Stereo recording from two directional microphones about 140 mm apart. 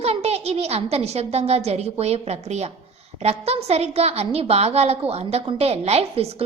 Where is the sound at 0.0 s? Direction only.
50° right (ahead or behind).